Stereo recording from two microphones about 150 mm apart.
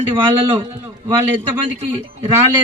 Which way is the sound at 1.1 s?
15° right (ahead or behind).